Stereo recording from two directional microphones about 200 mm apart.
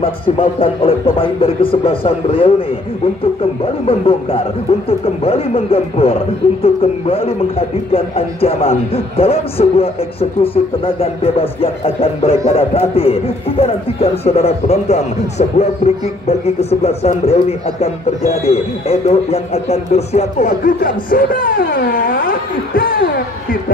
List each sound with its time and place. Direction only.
0.0 s speech: 25° left (ahead or behind)
3.8 s speech: 30° left (ahead or behind); by 23.6 s 45° left (ahead or behind)